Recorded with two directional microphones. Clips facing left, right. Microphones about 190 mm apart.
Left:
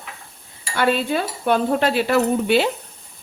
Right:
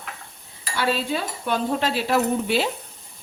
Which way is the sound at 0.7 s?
55° left (ahead or behind).